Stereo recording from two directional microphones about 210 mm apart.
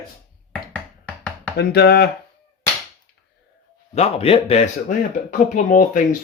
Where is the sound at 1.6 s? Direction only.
50° left (ahead or behind).